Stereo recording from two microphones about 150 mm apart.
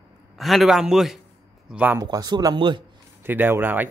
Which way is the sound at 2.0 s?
25° right (ahead or behind).